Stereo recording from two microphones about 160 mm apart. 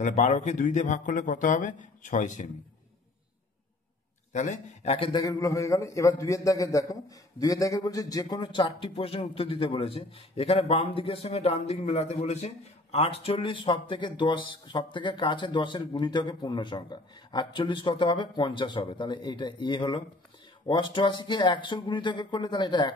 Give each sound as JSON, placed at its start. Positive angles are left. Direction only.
{"t": 0.0, "sound": "speech", "side_deg": 50}
{"t": 4.3, "sound": "speech", "side_deg": 50}
{"t": 5.2, "sound": "a man's voice", "side_deg": 20}